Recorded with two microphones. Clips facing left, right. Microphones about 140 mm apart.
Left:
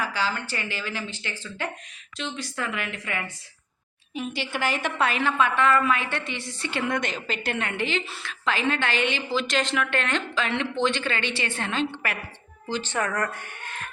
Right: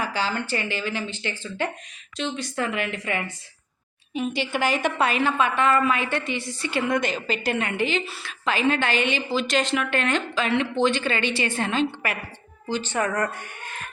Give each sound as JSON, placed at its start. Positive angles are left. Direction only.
{"t": 0.0, "sound": "a woman's voice", "side_deg": -25}